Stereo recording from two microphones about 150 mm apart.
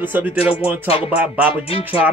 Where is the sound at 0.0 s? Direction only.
15° right (ahead or behind).